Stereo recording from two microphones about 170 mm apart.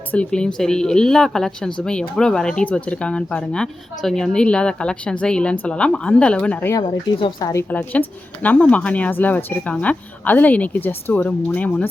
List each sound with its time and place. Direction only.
0.1 s speech: 5° left (ahead or behind)
6.7 s speech: 30° left (ahead or behind)
7.5 s speech: 10° left (ahead or behind)